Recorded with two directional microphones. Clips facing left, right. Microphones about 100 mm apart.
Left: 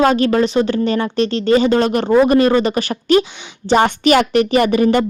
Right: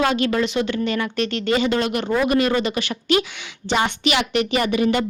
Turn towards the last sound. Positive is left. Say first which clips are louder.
# left 6 dB
turn(degrees=40)  # may be behind; listen again after turning